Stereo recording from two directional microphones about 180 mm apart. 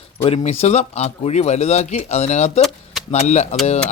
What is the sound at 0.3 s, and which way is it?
Speech, 35° left (ahead or behind).